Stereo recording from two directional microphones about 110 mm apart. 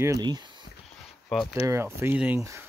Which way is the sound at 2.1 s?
10° right (ahead or behind).